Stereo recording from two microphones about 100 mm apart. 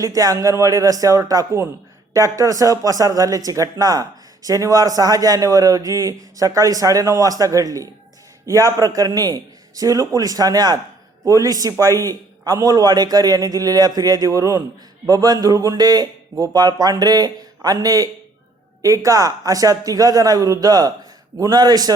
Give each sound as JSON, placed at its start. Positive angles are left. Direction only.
{"t": 0.0, "sound": "a man's voice", "side_deg": -35}